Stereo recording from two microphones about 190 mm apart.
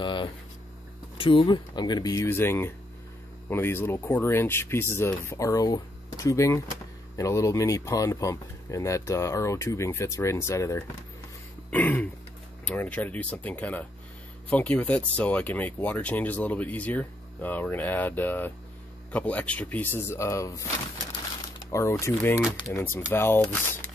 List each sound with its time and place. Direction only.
0.0 s speech: 25° left (ahead or behind)
21.7 s speech: 15° left (ahead or behind)